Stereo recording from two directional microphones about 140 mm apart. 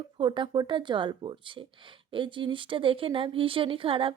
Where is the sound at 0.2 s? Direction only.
35° right (ahead or behind).